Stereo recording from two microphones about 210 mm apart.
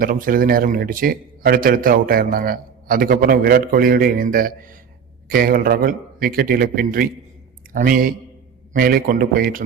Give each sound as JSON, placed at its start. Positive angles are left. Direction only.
{"t": 0.0, "sound": "a man's voice", "side_deg": -40}